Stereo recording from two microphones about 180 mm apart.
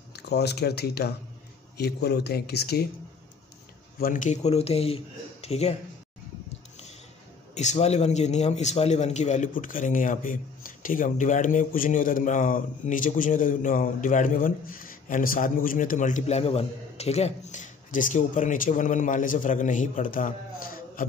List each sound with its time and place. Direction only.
0.1 s speech: 65° left (ahead or behind)
4.0 s speech: 45° left (ahead or behind)
7.5 s a man's voice: 40° left (ahead or behind)